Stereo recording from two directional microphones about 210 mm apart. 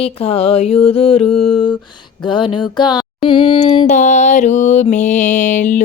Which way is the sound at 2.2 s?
20° left (ahead or behind).